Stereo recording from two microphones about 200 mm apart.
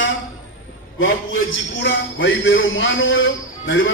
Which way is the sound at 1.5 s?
65° left (ahead or behind).